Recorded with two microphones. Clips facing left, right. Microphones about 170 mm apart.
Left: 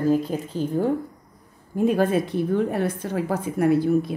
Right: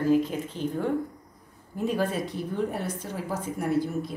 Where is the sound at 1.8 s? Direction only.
55° left (ahead or behind).